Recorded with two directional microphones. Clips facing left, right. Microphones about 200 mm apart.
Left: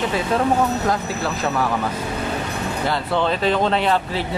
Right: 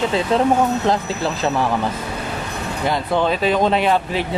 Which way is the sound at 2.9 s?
15° right (ahead or behind).